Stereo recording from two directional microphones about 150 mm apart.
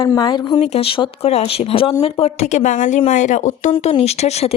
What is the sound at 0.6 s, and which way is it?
Speech, 40° left (ahead or behind).